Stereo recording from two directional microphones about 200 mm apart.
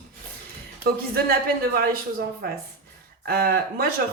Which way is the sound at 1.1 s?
50° right (ahead or behind).